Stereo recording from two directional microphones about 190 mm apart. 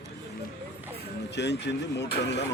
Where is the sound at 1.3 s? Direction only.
65° left (ahead or behind).